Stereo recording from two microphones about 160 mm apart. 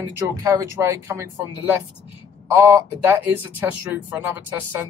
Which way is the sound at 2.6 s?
15° right (ahead or behind).